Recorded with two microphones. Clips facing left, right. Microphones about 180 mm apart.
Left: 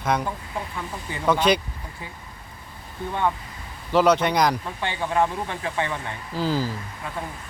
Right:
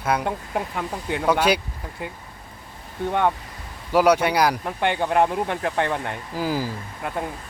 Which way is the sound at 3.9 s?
10° right (ahead or behind).